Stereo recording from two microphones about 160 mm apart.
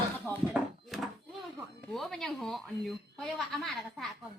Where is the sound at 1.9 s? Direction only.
Centre (ahead or behind).